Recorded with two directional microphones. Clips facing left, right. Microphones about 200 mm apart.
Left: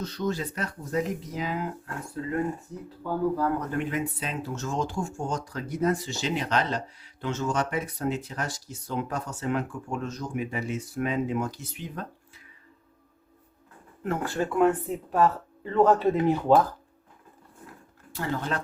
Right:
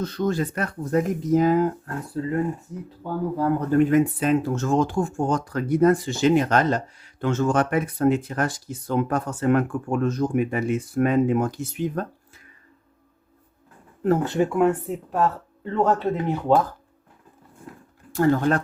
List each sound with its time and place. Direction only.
0.0 s speech: 50° right (ahead or behind)
3.0 s speech: 20° right (ahead or behind)
3.7 s speech: 45° right (ahead or behind)
14.0 s speech: 35° right (ahead or behind)
14.3 s speech: 15° right (ahead or behind); by 16.4 s centre (ahead or behind)
18.1 s speech: 50° right (ahead or behind)